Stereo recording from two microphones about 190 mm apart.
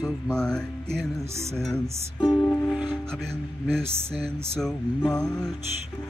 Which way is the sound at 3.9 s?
30° right (ahead or behind).